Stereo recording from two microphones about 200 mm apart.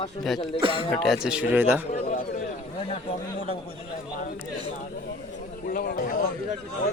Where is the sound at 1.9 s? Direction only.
45° left (ahead or behind).